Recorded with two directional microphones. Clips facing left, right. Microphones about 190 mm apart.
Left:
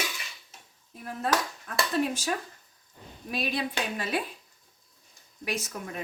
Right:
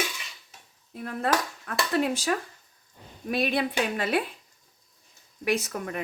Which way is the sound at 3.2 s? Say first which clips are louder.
Right 5 dB; 60° right (ahead or behind).